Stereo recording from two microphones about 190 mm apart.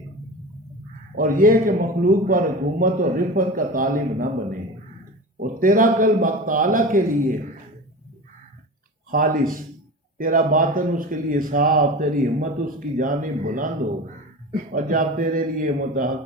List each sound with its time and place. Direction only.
1.1 s speech: 50° right (ahead or behind)
9.0 s speech: 45° right (ahead or behind)
14.7 s speech: 45° right (ahead or behind)